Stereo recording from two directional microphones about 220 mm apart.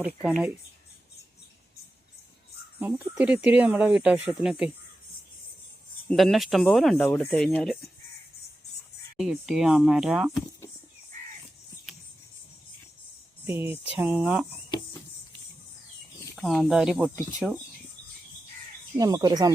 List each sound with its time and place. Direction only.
0.0 s speech: 5° right (ahead or behind)
2.7 s speech: 10° right (ahead or behind)
6.1 s speech: centre (ahead or behind)
9.1 s speech: centre (ahead or behind)
13.5 s speech: 10° right (ahead or behind)
16.3 s speech: centre (ahead or behind)
18.9 s speech: 20° right (ahead or behind)